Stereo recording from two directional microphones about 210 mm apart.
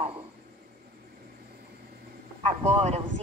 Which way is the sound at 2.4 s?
30° right (ahead or behind).